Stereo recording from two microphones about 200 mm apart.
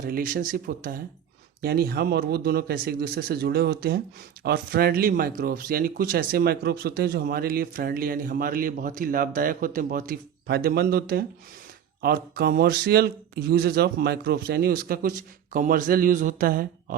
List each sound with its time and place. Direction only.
0.0 s speech: 45° right (ahead or behind)